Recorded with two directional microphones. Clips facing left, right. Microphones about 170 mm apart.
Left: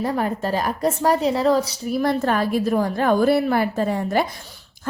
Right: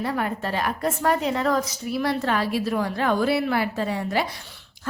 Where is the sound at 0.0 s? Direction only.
35° left (ahead or behind).